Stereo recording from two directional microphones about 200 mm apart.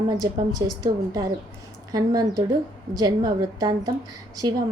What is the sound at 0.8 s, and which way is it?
A woman's voice, 20° right (ahead or behind).